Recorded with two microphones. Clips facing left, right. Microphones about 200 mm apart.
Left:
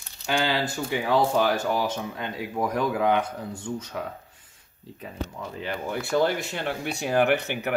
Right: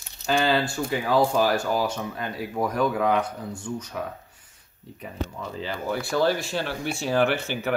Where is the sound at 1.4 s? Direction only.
20° left (ahead or behind).